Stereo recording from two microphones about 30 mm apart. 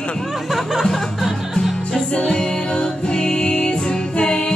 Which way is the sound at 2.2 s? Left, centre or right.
Centre.